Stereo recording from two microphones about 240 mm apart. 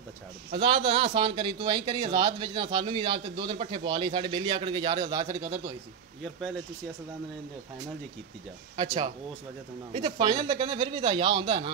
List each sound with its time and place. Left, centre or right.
0.5 s a man's voice: right
8.7 s a man's voice: centre